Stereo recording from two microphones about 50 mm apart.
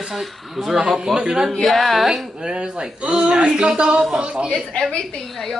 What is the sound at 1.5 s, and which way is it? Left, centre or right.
Speech, centre.